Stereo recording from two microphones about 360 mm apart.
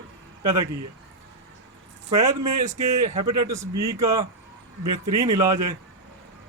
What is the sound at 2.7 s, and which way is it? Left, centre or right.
Speech, right.